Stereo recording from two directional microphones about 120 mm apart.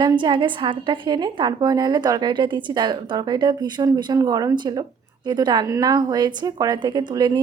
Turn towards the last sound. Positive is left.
turn(degrees=-35)  # may be behind; listen again after turning